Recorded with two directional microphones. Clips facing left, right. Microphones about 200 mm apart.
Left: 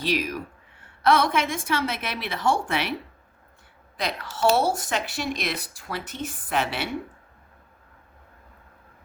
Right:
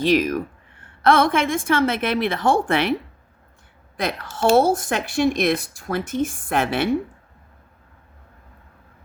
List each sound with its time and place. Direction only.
0.0 s speech: 50° right (ahead or behind)
3.9 s speech: 50° right (ahead or behind)